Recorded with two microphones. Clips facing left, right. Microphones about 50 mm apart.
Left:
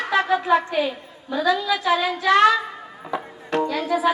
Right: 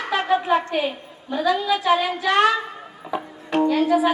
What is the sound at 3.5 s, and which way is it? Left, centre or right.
Speech, right.